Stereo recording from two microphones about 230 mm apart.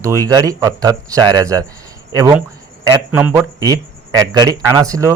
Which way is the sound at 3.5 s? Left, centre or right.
Centre.